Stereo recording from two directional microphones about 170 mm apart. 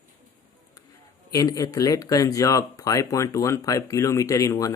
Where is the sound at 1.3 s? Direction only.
20° left (ahead or behind).